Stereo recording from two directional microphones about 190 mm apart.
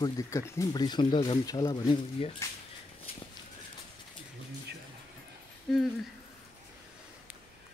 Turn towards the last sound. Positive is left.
turn(degrees=0)  # may be behind; listen again after turning